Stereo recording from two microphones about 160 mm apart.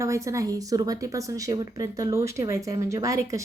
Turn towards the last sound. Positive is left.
turn(degrees=-20)  # may be behind; listen again after turning